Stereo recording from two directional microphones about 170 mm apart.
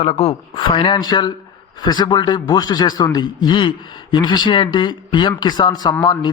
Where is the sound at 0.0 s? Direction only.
35° left (ahead or behind).